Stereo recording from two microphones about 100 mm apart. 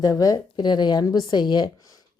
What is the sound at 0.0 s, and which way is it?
A woman's voice, 35° left (ahead or behind).